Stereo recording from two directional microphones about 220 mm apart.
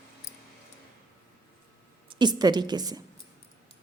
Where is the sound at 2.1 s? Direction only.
20° right (ahead or behind).